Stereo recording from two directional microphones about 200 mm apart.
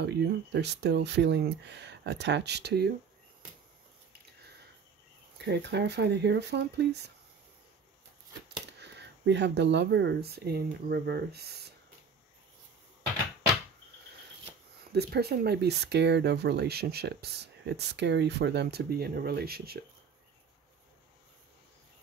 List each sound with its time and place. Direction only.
0.0 s speech: 60° right (ahead or behind)
5.4 s speech: 60° right (ahead or behind)
8.7 s speech: 60° right (ahead or behind)
14.9 s speech: 55° right (ahead or behind)